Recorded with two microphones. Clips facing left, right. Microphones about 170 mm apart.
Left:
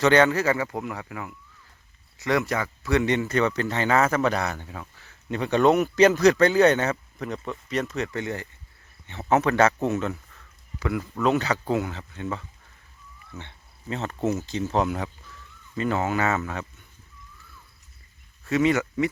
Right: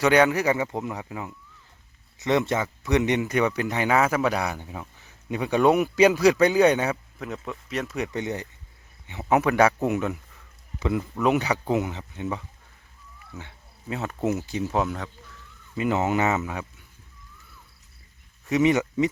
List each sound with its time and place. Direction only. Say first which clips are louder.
0.0 s speech: even; 10° right (ahead or behind)
7.9 s speech: even; 15° right (ahead or behind)
14.8 s speech: left 3 dB; 5° left (ahead or behind)
15.7 s speech: right 2 dB; 15° right (ahead or behind)
18.4 s speech: right 1 dB; 15° right (ahead or behind)